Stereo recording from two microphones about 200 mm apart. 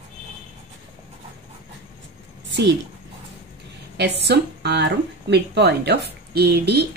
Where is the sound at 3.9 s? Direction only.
55° right (ahead or behind).